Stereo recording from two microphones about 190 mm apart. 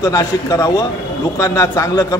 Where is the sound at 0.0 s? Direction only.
15° left (ahead or behind).